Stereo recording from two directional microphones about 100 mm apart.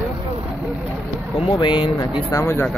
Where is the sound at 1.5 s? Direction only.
50° left (ahead or behind).